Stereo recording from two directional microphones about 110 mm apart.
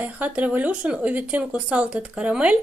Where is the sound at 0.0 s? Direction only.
15° right (ahead or behind).